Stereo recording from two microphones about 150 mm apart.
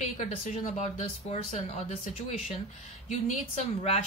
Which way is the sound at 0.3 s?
50° left (ahead or behind).